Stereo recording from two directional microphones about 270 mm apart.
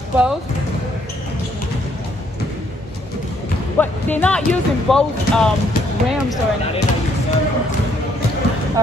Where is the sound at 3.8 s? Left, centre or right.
Centre.